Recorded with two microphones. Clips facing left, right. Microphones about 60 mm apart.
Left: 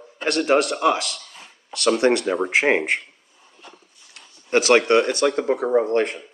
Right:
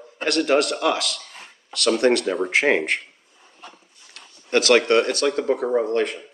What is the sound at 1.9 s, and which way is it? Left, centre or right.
Speech, centre.